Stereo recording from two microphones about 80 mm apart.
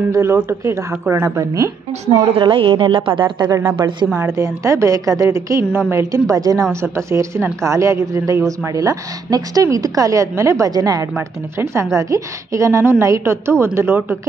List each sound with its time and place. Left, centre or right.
0.1 s a woman's voice: right
2.1 s a woman's voice: right
3.2 s speech: right
3.7 s a woman's voice: right
4.3 s a woman's voice: right
6.7 s a woman's voice: right
10.7 s a woman's voice: right
11.1 s a woman's voice: right